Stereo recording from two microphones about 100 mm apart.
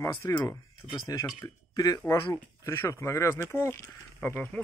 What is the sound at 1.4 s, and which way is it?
Speech, 40° left (ahead or behind).